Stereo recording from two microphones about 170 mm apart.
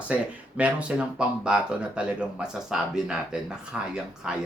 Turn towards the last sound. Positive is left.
turn(degrees=-5)  # may be behind; listen again after turning